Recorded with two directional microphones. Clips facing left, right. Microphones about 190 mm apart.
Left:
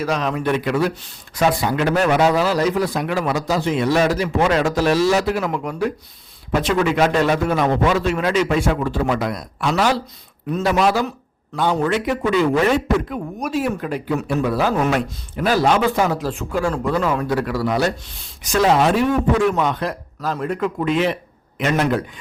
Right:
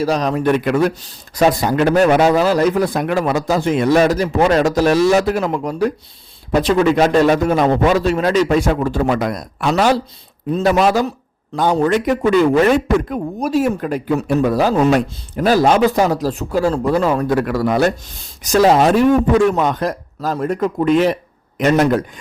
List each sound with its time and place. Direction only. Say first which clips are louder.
0.0 s a man's voice: right 5 dB; 35° right (ahead or behind)
13.4 s speech: right 5 dB; 40° right (ahead or behind)
18.4 s a man's voice: right 4 dB; 40° right (ahead or behind)